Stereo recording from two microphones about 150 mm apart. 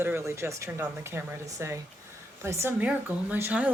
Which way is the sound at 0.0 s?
15° right (ahead or behind).